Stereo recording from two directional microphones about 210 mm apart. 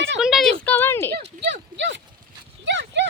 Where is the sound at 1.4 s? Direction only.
55° right (ahead or behind).